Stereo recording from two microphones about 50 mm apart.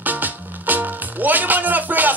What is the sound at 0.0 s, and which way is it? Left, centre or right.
Music, right.